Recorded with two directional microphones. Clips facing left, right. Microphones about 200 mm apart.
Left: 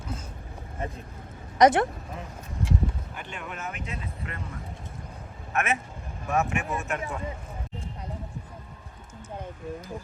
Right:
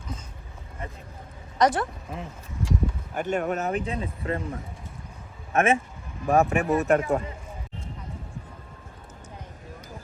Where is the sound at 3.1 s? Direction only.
45° right (ahead or behind).